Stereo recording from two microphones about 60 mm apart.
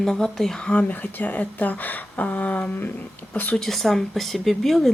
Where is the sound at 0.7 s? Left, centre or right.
Left.